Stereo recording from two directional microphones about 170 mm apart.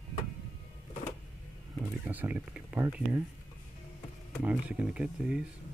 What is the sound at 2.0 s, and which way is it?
Speech, 10° right (ahead or behind).